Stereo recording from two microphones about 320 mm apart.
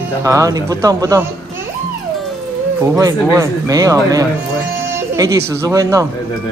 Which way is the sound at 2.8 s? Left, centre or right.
Centre.